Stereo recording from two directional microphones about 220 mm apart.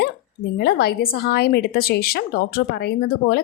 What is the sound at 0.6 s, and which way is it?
A woman's voice, 45° left (ahead or behind).